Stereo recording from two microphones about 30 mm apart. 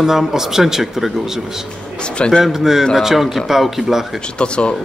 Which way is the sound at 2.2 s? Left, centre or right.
Left.